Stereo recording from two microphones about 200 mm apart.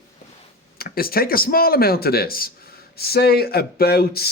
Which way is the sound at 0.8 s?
50° left (ahead or behind).